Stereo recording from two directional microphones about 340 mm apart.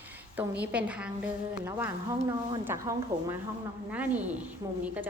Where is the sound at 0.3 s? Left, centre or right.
Centre.